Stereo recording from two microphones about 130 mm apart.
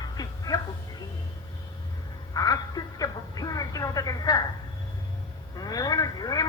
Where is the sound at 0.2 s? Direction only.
30° left (ahead or behind).